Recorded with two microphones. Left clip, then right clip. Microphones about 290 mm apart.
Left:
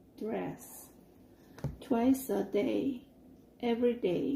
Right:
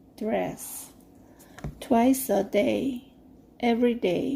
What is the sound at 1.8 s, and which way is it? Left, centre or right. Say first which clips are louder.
Speech: right 8 dB; right.